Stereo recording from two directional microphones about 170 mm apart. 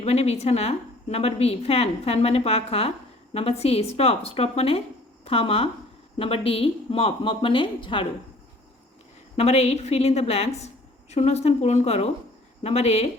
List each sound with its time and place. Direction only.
0.0 s a woman's voice: 40° left (ahead or behind)
9.3 s a woman's voice: 40° left (ahead or behind)